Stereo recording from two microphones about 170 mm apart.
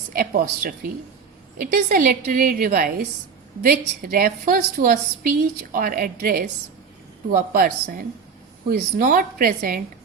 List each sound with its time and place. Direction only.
0.1 s a woman's voice: 55° right (ahead or behind)
1.7 s a woman's voice: 55° right (ahead or behind)